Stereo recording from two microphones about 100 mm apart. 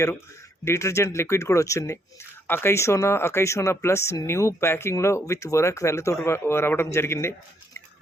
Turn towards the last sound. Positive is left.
turn(degrees=25)  # may be behind; listen again after turning